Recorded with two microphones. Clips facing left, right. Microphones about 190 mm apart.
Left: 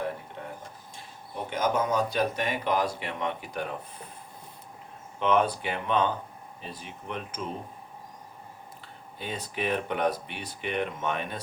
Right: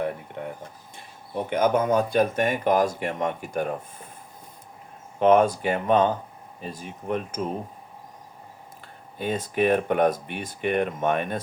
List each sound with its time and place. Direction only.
1.5 s speech: 55° right (ahead or behind)
5.2 s speech: 45° right (ahead or behind)
9.1 s speech: 50° right (ahead or behind)